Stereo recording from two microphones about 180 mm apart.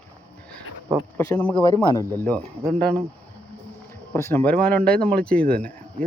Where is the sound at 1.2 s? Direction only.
10° left (ahead or behind).